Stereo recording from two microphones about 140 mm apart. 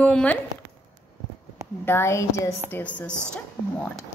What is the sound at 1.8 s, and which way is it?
A woman's voice, 15° left (ahead or behind).